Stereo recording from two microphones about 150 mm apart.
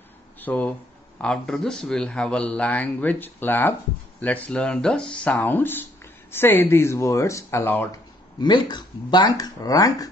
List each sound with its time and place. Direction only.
0.4 s speech: 10° left (ahead or behind)
8.4 s speech: 30° left (ahead or behind)